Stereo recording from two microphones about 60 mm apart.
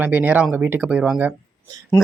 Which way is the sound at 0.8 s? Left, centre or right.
Right.